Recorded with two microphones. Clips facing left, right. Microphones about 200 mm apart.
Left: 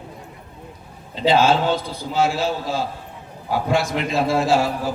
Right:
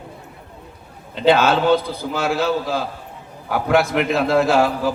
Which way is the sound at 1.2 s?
60° right (ahead or behind).